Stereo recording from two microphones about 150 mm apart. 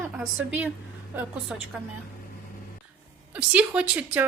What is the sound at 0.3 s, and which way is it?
Speech, 10° right (ahead or behind).